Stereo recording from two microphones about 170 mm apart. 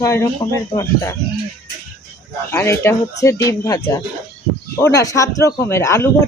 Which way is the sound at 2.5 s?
15° left (ahead or behind).